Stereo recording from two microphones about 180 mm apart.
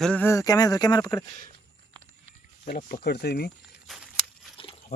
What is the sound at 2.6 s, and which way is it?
Speech, 45° left (ahead or behind).